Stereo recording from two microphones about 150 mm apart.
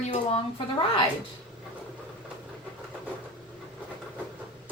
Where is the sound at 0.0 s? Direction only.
40° left (ahead or behind).